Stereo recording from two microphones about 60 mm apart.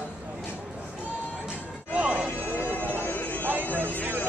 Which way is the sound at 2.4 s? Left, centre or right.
Left.